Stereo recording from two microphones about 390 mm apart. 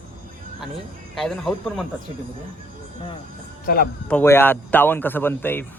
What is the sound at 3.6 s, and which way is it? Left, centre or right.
Speech, left.